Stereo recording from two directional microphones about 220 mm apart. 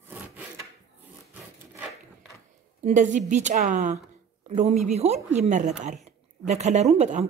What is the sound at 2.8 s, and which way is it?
A woman's voice, 35° right (ahead or behind).